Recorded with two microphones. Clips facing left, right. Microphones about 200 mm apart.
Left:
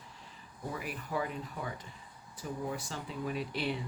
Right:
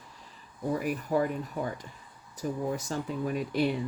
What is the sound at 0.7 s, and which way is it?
Speech, 45° right (ahead or behind).